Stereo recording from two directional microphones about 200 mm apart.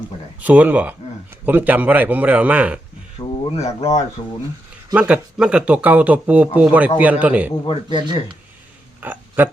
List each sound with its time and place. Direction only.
0.4 s speech: 5° right (ahead or behind)
3.2 s speech: 30° left (ahead or behind)
4.9 s speech: 5° right (ahead or behind)
9.0 s a sound: 10° right (ahead or behind)